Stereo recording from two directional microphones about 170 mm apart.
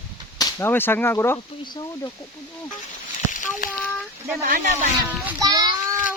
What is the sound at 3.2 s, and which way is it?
Fowl, 50° left (ahead or behind).